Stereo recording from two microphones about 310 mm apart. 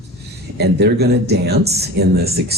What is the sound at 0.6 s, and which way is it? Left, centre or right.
Speech, right.